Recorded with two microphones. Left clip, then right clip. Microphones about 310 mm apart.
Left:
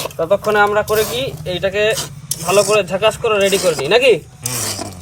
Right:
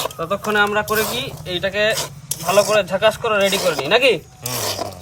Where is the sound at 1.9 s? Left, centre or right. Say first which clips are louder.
Left 2 dB; centre.